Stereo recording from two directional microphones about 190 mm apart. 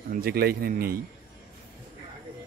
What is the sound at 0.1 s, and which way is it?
Speech, 55° right (ahead or behind).